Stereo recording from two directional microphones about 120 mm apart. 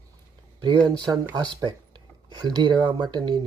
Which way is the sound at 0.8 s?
35° right (ahead or behind).